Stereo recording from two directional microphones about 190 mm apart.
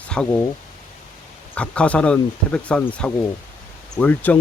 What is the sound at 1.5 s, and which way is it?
Speech, 5° left (ahead or behind).